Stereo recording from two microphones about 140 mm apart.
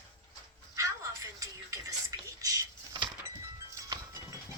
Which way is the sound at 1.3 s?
25° right (ahead or behind).